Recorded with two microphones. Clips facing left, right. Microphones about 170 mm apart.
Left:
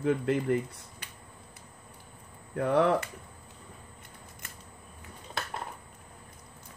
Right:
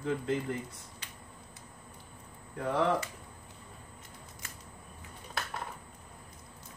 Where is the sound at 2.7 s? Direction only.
65° left (ahead or behind).